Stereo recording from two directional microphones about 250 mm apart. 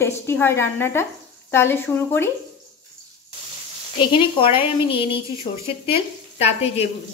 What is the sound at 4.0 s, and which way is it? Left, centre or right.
Speech, left.